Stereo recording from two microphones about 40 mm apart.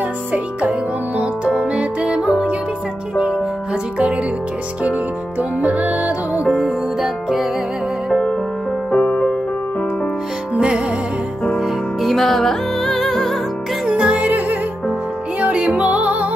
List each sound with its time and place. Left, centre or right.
0.3 s music: right
2.1 s music: centre
5.6 s music: right
6.6 s music: centre
8.1 s music: left
8.9 s music: left
12.0 s music: centre
13.8 s music: right
14.1 s music: right